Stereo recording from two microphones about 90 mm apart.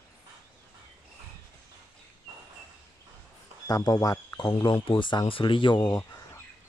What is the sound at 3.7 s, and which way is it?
Speech, 45° left (ahead or behind).